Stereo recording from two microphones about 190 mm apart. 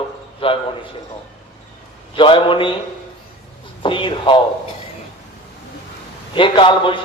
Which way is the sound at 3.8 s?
25° left (ahead or behind).